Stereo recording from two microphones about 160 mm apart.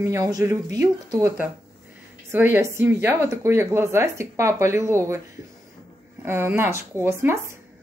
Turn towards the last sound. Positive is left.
turn(degrees=-15)  # may be behind; listen again after turning